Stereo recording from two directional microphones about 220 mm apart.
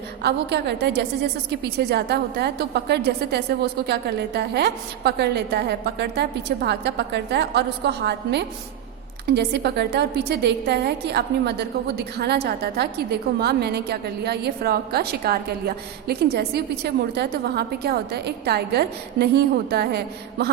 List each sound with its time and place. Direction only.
0.2 s a woman's voice: 50° right (ahead or behind)